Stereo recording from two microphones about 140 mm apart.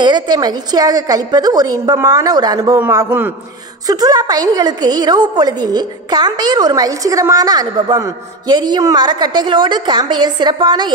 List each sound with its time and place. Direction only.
0.0 s a woman's voice: 30° right (ahead or behind)